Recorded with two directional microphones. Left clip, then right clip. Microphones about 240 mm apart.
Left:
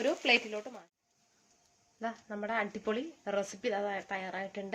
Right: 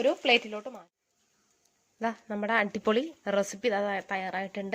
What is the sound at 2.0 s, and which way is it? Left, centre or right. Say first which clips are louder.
Speech: right 6 dB; right.